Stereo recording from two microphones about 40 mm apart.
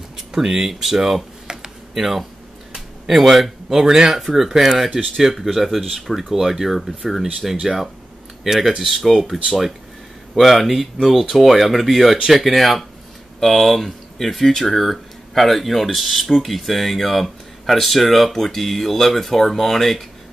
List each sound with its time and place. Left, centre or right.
0.3 s speech: centre
2.7 s a sound: centre
3.7 s speech: centre
4.1 s speech: centre